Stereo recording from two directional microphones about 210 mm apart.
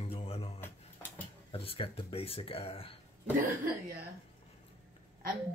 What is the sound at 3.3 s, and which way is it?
Speech, 45° right (ahead or behind).